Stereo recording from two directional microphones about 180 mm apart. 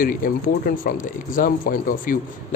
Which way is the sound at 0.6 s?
50° left (ahead or behind).